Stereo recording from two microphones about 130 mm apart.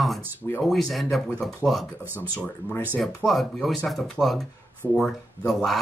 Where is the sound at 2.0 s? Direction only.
15° right (ahead or behind).